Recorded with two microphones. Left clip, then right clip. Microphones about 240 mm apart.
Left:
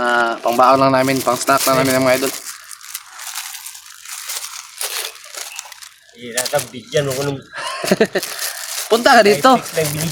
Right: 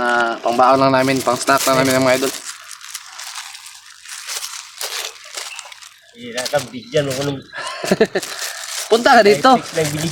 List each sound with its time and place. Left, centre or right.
0.0 s speech: centre
4.8 s crunch: centre
6.5 s speech: left
7.5 s speech: centre